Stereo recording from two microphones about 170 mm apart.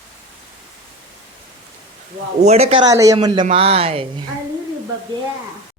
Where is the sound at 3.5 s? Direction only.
35° right (ahead or behind).